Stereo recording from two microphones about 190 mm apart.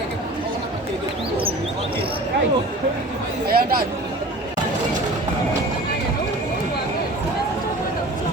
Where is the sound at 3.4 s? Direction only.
50° right (ahead or behind).